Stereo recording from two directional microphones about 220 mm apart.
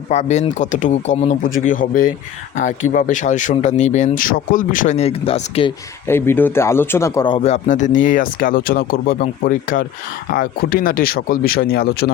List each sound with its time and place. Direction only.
0.1 s speech: 30° left (ahead or behind)
6.1 s speech: 10° left (ahead or behind); by 12.1 s 45° left (ahead or behind)